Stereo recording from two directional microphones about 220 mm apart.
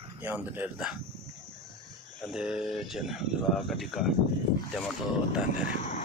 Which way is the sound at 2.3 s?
5° right (ahead or behind).